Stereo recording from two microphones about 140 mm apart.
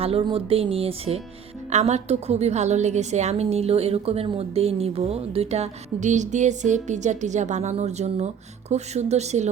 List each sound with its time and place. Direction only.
0.0 s a woman's voice: 45° right (ahead or behind)